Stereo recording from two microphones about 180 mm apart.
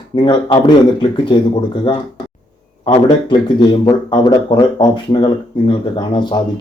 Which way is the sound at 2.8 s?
25° left (ahead or behind).